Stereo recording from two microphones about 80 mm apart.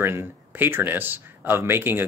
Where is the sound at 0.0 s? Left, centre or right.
Right.